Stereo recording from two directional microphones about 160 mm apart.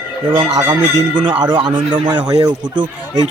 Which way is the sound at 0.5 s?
25° right (ahead or behind).